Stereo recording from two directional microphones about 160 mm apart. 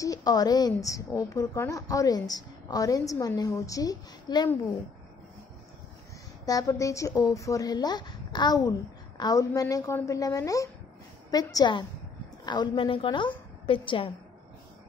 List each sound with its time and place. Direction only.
0.0 s a woman's voice: 25° left (ahead or behind)
6.4 s a woman's voice: 20° left (ahead or behind)